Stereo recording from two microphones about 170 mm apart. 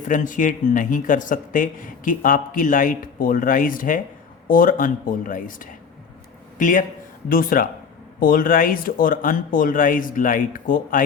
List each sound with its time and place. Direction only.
0.1 s speech: 50° left (ahead or behind)